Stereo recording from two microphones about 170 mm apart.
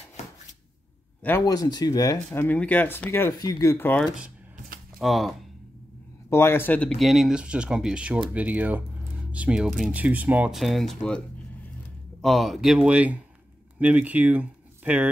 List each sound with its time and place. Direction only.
1.4 s speech: 20° left (ahead or behind)
2.4 s speech: 10° left (ahead or behind)
4.0 s speech: centre (ahead or behind)
6.3 s speech: 15° left (ahead or behind); by 15.0 s 10° right (ahead or behind)